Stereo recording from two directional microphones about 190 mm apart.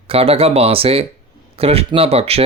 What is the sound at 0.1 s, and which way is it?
Speech, 30° right (ahead or behind).